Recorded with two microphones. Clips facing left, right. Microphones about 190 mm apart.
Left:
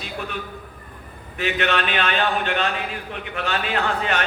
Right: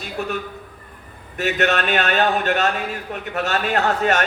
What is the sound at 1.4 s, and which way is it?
A man's voice, 45° right (ahead or behind).